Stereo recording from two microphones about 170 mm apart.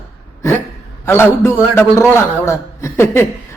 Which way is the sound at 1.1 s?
15° left (ahead or behind).